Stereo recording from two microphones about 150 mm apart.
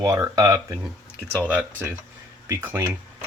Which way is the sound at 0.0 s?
20° right (ahead or behind).